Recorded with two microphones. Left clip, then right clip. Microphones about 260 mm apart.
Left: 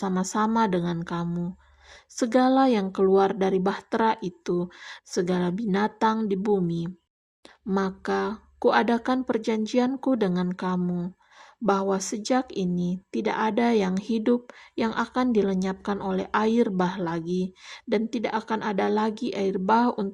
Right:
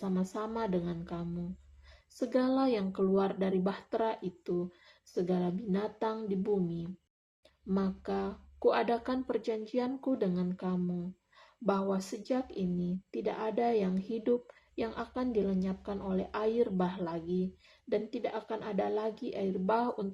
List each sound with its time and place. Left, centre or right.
0.0 s speech: left